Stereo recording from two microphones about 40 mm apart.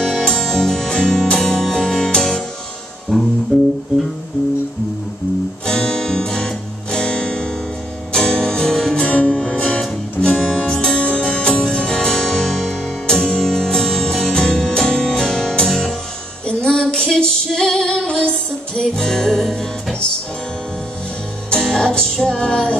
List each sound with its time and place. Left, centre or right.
0.0 s music: centre
5.7 s music: centre
9.1 s music: left
9.6 s music: centre
21.5 s music: centre